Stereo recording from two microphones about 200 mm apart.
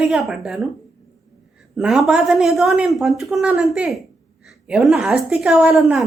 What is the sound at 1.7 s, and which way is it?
A woman's voice, centre (ahead or behind).